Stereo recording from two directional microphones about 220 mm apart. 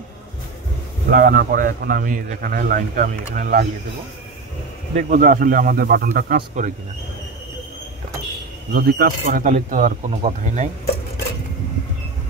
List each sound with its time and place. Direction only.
1.1 s a man's voice: 40° right (ahead or behind)
4.9 s a man's voice: 35° right (ahead or behind)
8.7 s a man's voice: 45° right (ahead or behind)